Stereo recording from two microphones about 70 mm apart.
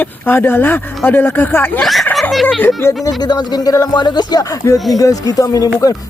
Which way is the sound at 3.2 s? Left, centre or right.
Left.